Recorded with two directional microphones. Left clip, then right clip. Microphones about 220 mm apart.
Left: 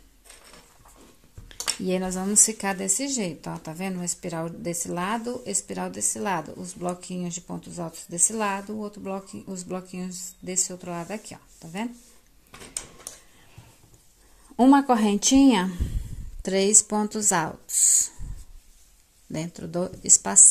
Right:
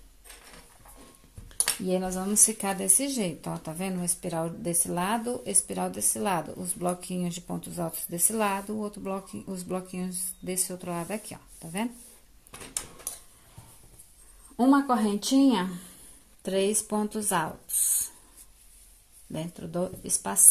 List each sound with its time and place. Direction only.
1.9 s a woman's voice: 20° left (ahead or behind); by 11.9 s centre (ahead or behind)
14.6 s speech: 30° left (ahead or behind)
19.3 s speech: 20° left (ahead or behind)